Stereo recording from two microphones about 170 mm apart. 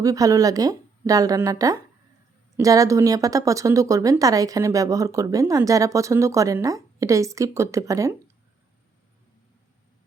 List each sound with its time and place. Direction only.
0.0 s speech: 20° right (ahead or behind)